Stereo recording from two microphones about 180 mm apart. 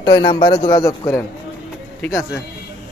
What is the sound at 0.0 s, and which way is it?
A man's voice, 25° left (ahead or behind).